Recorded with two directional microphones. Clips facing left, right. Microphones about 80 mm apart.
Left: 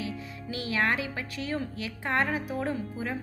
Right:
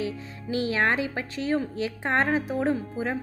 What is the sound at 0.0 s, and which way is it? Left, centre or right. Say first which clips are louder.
A woman's voice: right 4 dB; right.